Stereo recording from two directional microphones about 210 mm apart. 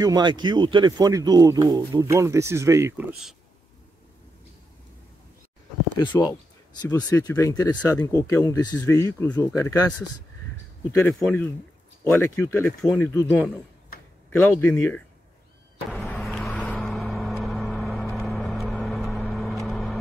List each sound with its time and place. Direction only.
0.0 s speech: 20° right (ahead or behind)
5.9 s speech: 15° left (ahead or behind)
11.1 s speech: 5° left (ahead or behind)
15.9 s vehicle: 5° left (ahead or behind)